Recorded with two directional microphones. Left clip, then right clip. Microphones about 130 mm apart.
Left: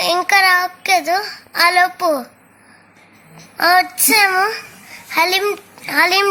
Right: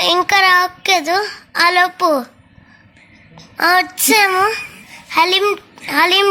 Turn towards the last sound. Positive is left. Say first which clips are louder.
# right 1 dB
turn(degrees=-15)  # may be behind; listen again after turning